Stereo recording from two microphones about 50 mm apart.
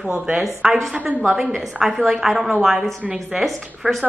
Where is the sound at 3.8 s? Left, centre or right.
Centre.